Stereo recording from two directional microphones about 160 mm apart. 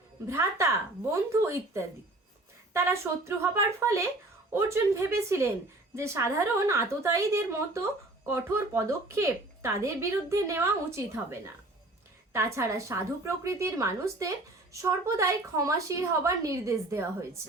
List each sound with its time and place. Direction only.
0.3 s a woman's voice: 20° right (ahead or behind)